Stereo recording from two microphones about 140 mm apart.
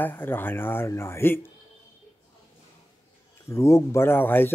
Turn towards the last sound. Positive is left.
turn(degrees=15)  # may be behind; listen again after turning